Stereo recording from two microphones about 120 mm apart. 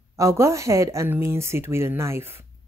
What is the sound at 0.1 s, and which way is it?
A woman's voice, 25° right (ahead or behind).